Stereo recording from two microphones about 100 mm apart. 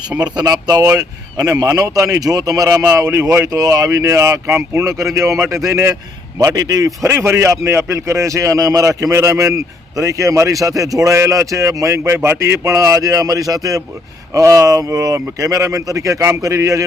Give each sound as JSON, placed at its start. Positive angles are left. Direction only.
{"t": 0.3, "sound": "a man's voice", "side_deg": -40}
{"t": 7.1, "sound": "a man's voice", "side_deg": -25}